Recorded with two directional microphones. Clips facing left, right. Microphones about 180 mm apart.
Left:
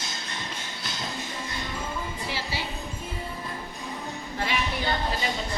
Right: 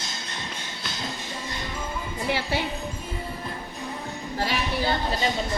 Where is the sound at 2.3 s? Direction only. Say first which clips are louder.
Right 8 dB; 55° right (ahead or behind).